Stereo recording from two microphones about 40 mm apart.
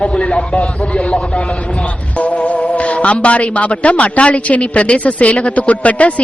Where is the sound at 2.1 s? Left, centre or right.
Left.